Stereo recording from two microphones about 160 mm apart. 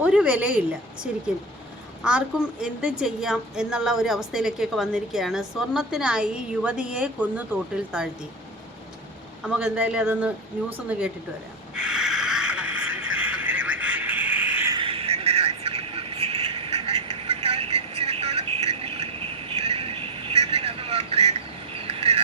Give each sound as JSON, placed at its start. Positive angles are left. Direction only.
{"t": 0.0, "sound": "a woman's voice", "side_deg": -5}
{"t": 2.0, "sound": "a woman's voice", "side_deg": -5}
{"t": 9.4, "sound": "speech", "side_deg": -5}
{"t": 11.7, "sound": "a sound", "side_deg": -5}
{"t": 14.7, "sound": "vehicle", "side_deg": -35}